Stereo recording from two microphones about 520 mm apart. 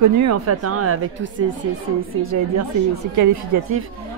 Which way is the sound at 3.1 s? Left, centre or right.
Right.